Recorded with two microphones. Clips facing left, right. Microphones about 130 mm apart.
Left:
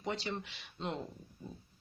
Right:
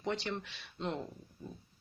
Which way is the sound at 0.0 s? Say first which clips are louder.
Right 2 dB; 10° left (ahead or behind).